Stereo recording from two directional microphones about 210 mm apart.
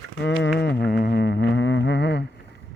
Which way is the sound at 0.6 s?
50° left (ahead or behind).